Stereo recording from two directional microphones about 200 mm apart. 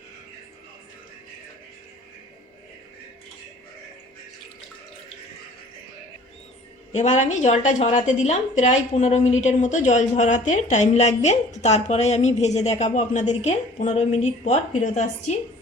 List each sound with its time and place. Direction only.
6.9 s a woman's voice: 35° left (ahead or behind)